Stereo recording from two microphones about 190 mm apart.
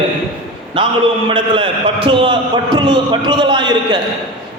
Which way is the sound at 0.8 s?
25° right (ahead or behind).